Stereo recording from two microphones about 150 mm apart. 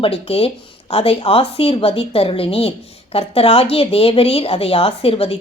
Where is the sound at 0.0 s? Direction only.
40° left (ahead or behind).